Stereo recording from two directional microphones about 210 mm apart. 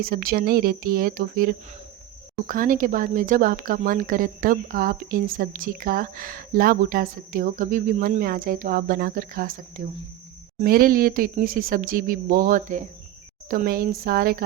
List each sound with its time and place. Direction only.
0.0 s speech: 45° right (ahead or behind)